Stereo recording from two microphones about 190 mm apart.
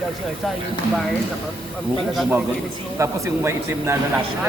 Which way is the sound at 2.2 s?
5° right (ahead or behind).